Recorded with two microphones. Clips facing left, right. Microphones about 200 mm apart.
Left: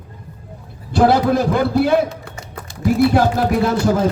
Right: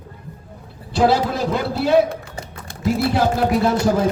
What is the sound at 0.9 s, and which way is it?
A man's voice, 55° left (ahead or behind).